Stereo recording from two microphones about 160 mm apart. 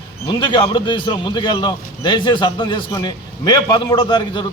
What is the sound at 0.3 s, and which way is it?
A man's voice, 30° left (ahead or behind).